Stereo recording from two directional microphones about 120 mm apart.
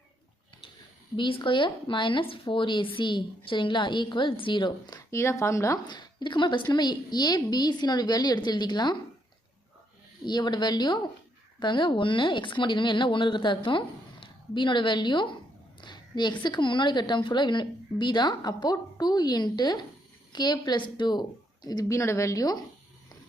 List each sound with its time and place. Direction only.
1.1 s speech: 45° left (ahead or behind)
5.1 s speech: 25° left (ahead or behind)
5.9 s a woman's voice: 40° left (ahead or behind)
10.2 s a woman's voice: 35° left (ahead or behind)